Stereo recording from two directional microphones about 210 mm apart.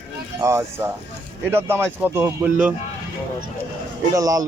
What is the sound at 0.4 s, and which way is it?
Speech, 15° right (ahead or behind).